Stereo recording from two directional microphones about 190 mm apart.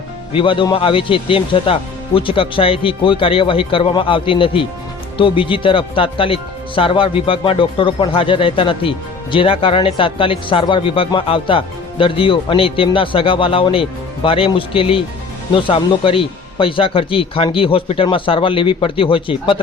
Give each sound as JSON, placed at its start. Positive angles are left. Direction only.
{"t": 0.3, "sound": "speech", "side_deg": 25}